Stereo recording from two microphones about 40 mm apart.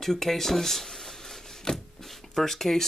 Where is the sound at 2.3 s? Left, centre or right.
Centre.